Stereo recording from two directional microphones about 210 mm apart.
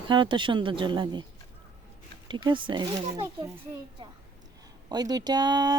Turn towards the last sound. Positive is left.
turn(degrees=-20)  # may be behind; listen again after turning